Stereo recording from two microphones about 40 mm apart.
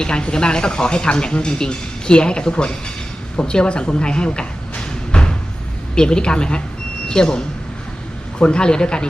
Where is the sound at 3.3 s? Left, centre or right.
Left.